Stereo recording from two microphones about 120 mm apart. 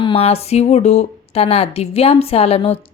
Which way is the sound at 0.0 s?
50° left (ahead or behind).